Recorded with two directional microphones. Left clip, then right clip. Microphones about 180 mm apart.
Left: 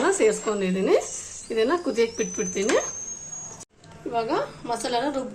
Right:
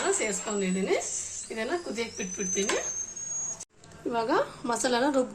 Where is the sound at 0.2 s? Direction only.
50° left (ahead or behind).